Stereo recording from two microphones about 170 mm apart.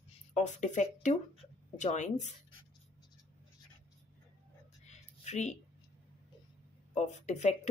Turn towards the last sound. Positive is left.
turn(degrees=40)  # may be behind; listen again after turning